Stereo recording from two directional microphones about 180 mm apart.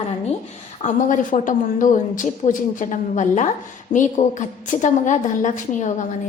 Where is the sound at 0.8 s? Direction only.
45° left (ahead or behind).